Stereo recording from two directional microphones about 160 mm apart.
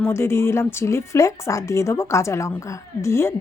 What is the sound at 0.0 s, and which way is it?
A woman's voice, 15° left (ahead or behind).